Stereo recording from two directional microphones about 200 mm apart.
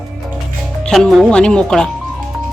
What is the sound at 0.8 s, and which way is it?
Speech, 5° left (ahead or behind).